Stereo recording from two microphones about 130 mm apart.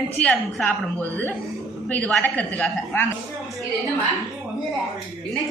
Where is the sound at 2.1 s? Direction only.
10° left (ahead or behind).